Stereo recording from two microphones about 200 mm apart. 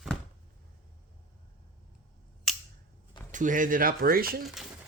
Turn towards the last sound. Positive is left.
turn(degrees=0)  # may be behind; listen again after turning